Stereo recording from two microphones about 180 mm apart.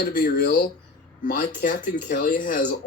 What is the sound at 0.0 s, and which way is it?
Speech, 60° left (ahead or behind).